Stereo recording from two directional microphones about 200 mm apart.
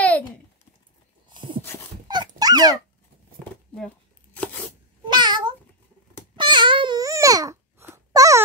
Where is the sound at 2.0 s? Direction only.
20° right (ahead or behind).